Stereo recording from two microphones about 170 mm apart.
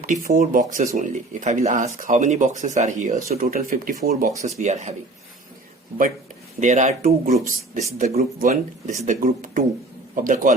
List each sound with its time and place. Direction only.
0.0 s speech: 50° right (ahead or behind)
3.3 s speech: 60° right (ahead or behind)
4.4 s speech: 40° right (ahead or behind)
6.6 s speech: 45° right (ahead or behind)